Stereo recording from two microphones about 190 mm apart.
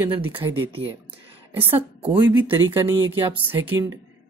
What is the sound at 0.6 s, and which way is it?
A woman's voice, 30° right (ahead or behind).